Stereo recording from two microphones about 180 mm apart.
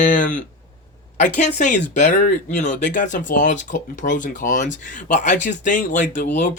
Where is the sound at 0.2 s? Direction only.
45° left (ahead or behind).